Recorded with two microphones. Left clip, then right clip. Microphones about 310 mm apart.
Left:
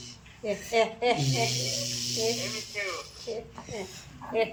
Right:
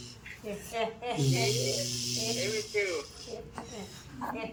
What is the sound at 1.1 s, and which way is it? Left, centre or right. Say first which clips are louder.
Speech: left 1 dB; centre.